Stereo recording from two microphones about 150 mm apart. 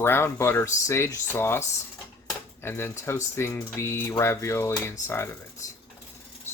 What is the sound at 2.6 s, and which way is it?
Speech, 15° left (ahead or behind).